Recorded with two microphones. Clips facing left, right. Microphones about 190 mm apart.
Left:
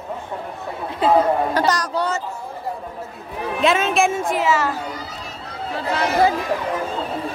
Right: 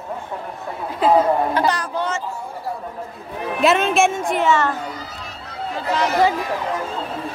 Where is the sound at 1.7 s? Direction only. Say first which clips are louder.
Left 1 dB; 40° left (ahead or behind).